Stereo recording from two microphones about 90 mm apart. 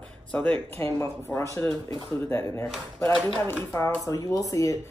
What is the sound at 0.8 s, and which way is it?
Speech, 30° left (ahead or behind).